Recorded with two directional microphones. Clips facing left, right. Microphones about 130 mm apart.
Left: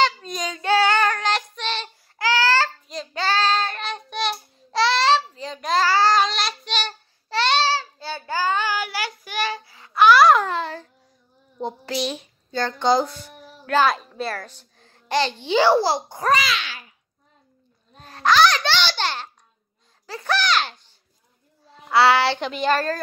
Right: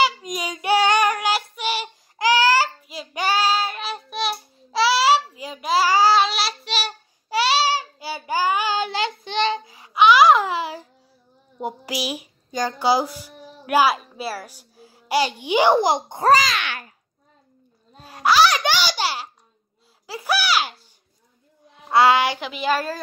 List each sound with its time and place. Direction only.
0.0 s child singing: 10° right (ahead or behind)
9.2 s a sound: 25° right (ahead or behind)
9.9 s babbling: centre (ahead or behind)
11.6 s speech: 10° right (ahead or behind)
16.3 s a child's voice: 35° right (ahead or behind)
16.5 s a sound: 55° right (ahead or behind)
18.0 s babbling: 10° right (ahead or behind)
20.1 s a sound: 10° right (ahead or behind)
21.8 s child singing: 20° right (ahead or behind)
22.4 s speech: 5° right (ahead or behind)